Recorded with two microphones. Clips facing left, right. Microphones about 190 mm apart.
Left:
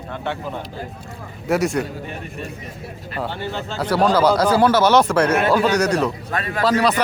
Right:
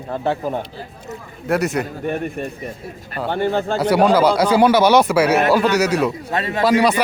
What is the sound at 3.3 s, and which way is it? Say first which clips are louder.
Speech: right 8 dB; 50° right (ahead or behind).